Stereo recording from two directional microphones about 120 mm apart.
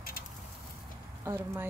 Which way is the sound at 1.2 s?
20° right (ahead or behind).